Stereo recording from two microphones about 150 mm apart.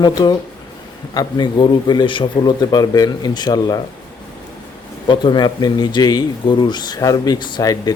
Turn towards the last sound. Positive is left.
turn(degrees=25)  # may be behind; listen again after turning